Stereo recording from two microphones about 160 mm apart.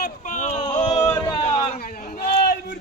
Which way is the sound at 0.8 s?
40° left (ahead or behind).